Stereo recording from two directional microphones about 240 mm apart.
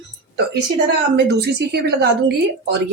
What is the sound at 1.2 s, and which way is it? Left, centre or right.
Speech, right.